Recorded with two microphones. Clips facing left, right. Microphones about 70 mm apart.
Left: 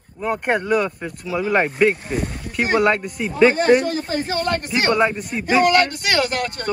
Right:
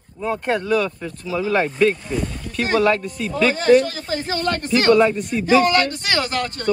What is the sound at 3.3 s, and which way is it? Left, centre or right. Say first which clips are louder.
Speech: left 1 dB; left.